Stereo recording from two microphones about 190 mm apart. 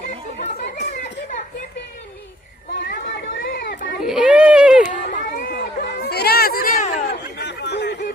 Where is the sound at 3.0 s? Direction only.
80° left.